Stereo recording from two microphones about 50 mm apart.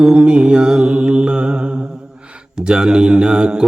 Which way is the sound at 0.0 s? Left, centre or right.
Centre.